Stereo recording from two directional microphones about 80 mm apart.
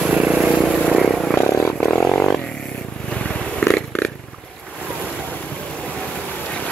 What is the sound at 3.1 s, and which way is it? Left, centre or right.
Purr, centre.